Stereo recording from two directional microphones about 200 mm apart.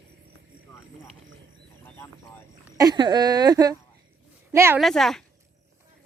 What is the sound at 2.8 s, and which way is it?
A woman's voice, 20° right (ahead or behind).